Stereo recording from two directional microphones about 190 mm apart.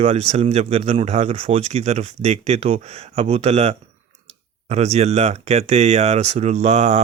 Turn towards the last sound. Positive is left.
turn(degrees=-35)  # may be behind; listen again after turning